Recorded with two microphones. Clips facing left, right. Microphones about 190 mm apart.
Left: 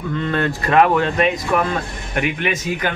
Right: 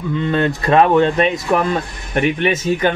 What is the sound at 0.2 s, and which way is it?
Speech, 20° right (ahead or behind).